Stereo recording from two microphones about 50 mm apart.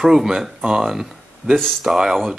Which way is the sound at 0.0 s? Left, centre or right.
Centre.